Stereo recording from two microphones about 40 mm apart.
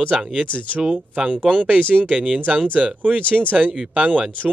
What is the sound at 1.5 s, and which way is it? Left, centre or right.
Speech, right.